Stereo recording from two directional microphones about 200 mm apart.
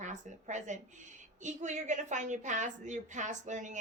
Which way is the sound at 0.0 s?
35° right (ahead or behind).